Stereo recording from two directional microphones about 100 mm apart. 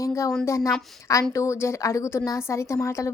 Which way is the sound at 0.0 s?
30° left (ahead or behind).